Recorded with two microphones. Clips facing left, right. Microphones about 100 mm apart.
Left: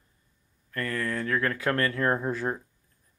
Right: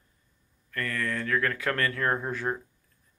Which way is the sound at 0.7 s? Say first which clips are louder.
Left 1 dB; 25° left (ahead or behind).